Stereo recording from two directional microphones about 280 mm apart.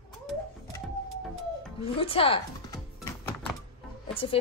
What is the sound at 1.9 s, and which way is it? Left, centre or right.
Speech, centre.